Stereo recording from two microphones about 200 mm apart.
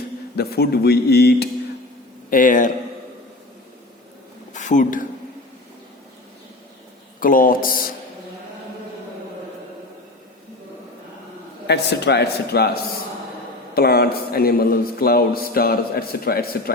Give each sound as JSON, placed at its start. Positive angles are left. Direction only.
{"t": 0.3, "sound": "a man's voice", "side_deg": 50}
{"t": 4.5, "sound": "a woman's voice", "side_deg": 40}
{"t": 7.2, "sound": "a man's voice", "side_deg": 45}
{"t": 11.7, "sound": "a man's voice", "side_deg": 60}
{"t": 13.7, "sound": "a man's voice", "side_deg": 50}